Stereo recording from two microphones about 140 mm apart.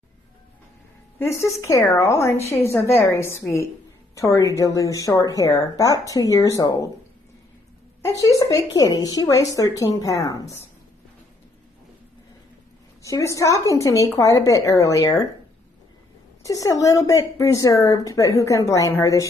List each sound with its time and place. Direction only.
1.6 s speech: 20° left (ahead or behind)
8.0 s speech: 25° left (ahead or behind)
13.0 s speech: 20° left (ahead or behind)
16.4 s speech: 25° left (ahead or behind)